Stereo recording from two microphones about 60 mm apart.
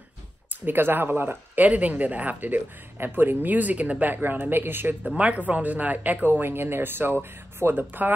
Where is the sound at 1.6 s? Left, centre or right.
Right.